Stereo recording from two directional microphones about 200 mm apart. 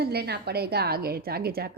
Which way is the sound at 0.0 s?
55° right (ahead or behind).